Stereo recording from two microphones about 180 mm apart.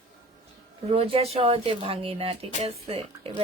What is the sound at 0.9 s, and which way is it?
A woman's voice, 35° right (ahead or behind).